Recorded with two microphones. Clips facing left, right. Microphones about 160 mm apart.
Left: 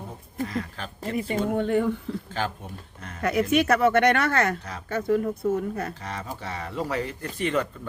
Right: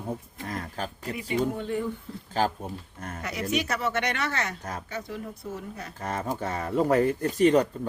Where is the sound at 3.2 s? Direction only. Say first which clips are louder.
Left 8 dB; 55° left (ahead or behind).